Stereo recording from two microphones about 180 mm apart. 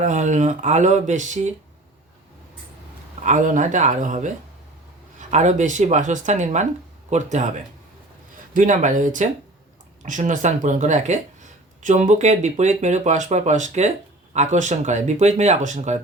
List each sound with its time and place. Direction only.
0.0 s speech: 40° right (ahead or behind)
3.2 s speech: 45° right (ahead or behind)
5.3 s speech: 40° right (ahead or behind)
8.5 s speech: 45° right (ahead or behind)